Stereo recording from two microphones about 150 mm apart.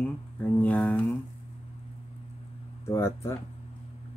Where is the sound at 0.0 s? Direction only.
10° left (ahead or behind).